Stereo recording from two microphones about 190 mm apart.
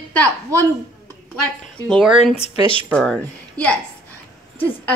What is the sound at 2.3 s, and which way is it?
Speech, 30° left (ahead or behind).